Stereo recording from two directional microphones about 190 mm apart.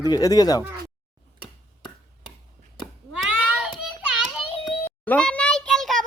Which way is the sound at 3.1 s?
5° right (ahead or behind).